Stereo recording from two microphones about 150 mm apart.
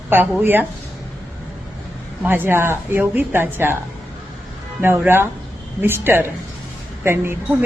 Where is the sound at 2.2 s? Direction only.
15° right (ahead or behind).